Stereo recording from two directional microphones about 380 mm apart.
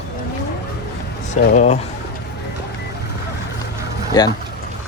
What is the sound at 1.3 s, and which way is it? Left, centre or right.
Speech, centre.